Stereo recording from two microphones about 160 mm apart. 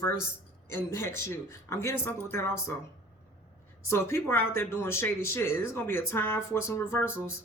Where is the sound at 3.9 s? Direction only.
15° left (ahead or behind).